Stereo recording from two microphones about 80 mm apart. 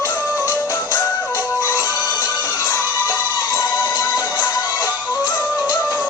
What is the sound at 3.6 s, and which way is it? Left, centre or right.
Music, centre.